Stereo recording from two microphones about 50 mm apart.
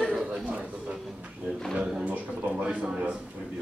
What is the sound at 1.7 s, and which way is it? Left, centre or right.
Speech, right.